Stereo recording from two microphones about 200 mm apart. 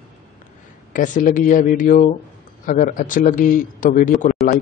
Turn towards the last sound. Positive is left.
turn(degrees=40)  # may be behind; listen again after turning